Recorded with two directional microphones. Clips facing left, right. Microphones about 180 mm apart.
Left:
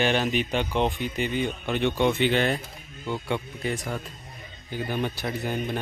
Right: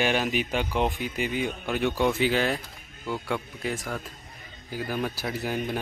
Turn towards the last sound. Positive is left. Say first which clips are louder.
# even
turn(degrees=-5)  # may be behind; listen again after turning